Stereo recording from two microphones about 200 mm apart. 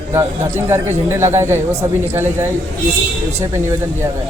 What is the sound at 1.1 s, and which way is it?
A man's voice, 15° right (ahead or behind).